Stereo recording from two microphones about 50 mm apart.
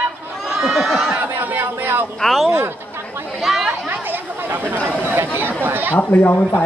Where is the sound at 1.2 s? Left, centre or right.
Right.